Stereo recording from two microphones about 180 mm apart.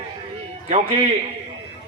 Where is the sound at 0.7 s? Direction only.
35° right (ahead or behind).